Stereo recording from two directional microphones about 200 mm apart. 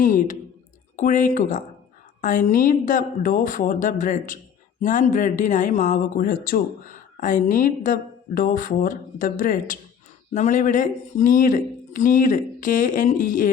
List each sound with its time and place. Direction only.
0.0 s speech: 40° left (ahead or behind)